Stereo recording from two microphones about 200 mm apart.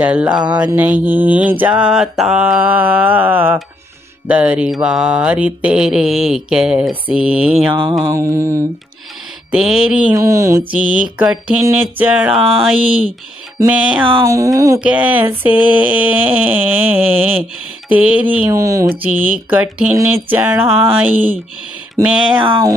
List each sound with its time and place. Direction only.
0.0 s speech: 5° right (ahead or behind)
4.3 s mantra: 5° right (ahead or behind)
8.1 s speech: 15° right (ahead or behind)
9.5 s mantra: centre (ahead or behind)
10.1 s speech: 15° right (ahead or behind)
14.0 s speech: 20° right (ahead or behind)
22.0 s mantra: 5° right (ahead or behind)
22.4 s a sound: 20° right (ahead or behind)